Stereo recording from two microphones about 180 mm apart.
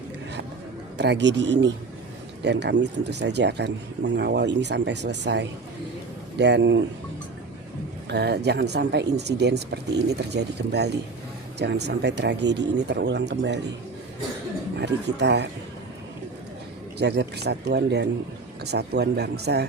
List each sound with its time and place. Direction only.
0.9 s speech: 70° right (ahead or behind)
8.1 s speech: 70° right (ahead or behind)
14.8 s speech: 70° right (ahead or behind)
17.0 s speech: 70° right (ahead or behind)